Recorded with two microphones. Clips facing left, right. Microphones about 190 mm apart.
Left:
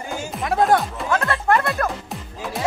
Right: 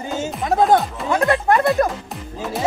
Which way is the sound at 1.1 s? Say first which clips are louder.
Right 3 dB; 15° right (ahead or behind).